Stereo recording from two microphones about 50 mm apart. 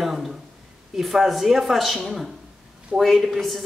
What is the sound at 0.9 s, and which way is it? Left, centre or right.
Speech, centre.